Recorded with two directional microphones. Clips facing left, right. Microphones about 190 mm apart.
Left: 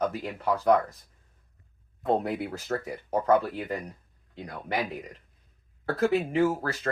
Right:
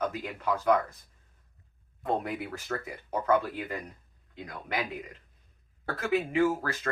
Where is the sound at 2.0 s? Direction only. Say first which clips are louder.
Left 4 dB; 30° left (ahead or behind).